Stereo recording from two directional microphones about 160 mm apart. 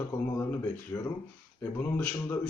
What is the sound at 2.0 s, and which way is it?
Speech, 10° left (ahead or behind).